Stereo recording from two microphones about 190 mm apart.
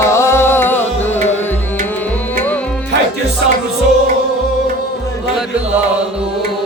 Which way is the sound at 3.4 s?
65° right (ahead or behind).